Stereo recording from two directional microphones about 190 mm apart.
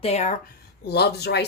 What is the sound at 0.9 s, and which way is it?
Speech, 60° left (ahead or behind).